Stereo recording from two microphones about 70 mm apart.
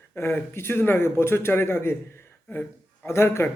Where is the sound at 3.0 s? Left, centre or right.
Left.